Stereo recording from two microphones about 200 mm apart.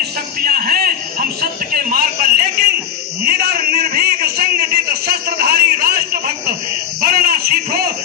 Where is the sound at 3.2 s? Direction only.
50° right (ahead or behind).